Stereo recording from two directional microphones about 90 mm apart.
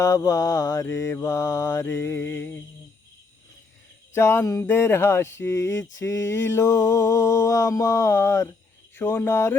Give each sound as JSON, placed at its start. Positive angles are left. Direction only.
{"t": 0.0, "sound": "speech", "side_deg": 40}
{"t": 4.1, "sound": "speech", "side_deg": 30}